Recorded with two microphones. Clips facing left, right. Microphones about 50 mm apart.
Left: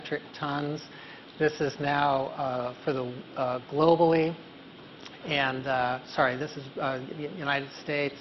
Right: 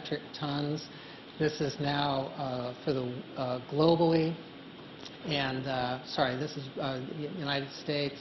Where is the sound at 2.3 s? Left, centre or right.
Left.